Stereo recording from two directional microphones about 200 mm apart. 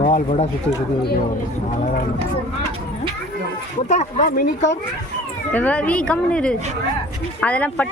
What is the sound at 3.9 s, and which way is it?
Speech, 35° left (ahead or behind).